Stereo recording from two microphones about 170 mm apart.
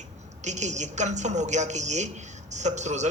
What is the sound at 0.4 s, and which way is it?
A woman's voice, 45° right (ahead or behind).